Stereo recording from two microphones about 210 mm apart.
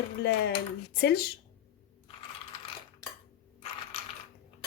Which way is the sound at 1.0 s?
50° left (ahead or behind).